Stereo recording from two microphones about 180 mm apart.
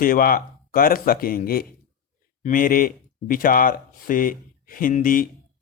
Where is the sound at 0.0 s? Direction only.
50° left (ahead or behind).